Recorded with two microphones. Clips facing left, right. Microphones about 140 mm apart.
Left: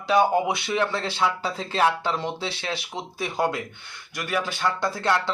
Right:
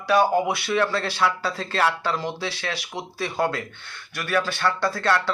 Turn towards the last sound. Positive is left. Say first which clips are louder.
# right 1 dB
turn(degrees=15)  # may be behind; listen again after turning